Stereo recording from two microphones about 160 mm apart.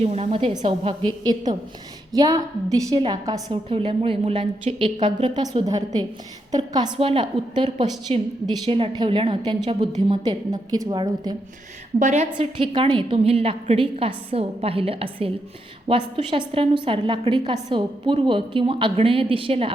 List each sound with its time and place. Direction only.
0.0 s a woman's voice: 40° right (ahead or behind); by 11.3 s 25° right (ahead or behind)
11.9 s a woman's voice: 45° right (ahead or behind)
12.4 s a woman's voice: 35° right (ahead or behind)